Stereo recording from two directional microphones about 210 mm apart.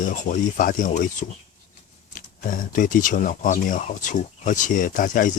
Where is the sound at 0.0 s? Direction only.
40° left (ahead or behind).